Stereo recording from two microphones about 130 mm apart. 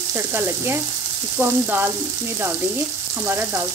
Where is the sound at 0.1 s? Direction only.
15° right (ahead or behind).